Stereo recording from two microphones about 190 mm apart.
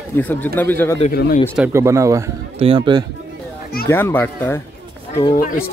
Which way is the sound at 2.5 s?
25° right (ahead or behind).